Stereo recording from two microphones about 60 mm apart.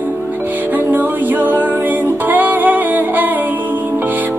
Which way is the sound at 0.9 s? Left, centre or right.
Right.